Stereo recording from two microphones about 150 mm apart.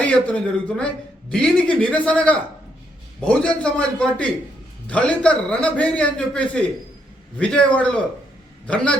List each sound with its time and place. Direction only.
0.0 s speech: 10° left (ahead or behind)